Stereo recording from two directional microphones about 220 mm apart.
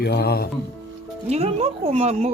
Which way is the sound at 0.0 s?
45° left (ahead or behind).